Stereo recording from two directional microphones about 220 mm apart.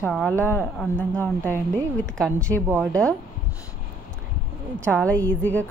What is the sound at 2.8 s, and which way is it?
Speech, 5° left (ahead or behind).